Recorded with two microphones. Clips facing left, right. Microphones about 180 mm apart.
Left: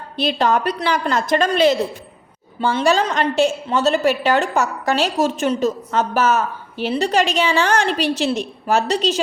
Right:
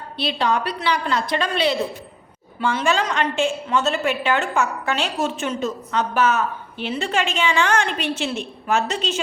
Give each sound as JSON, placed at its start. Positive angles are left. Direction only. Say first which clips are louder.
{"t": 0.2, "sound": "a woman's voice", "louder": "left 4 dB", "side_deg": 45}
{"t": 2.6, "sound": "a woman's voice", "louder": "left 4 dB", "side_deg": 35}